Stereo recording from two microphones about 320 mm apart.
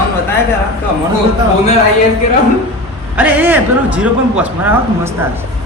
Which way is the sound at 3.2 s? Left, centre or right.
Centre.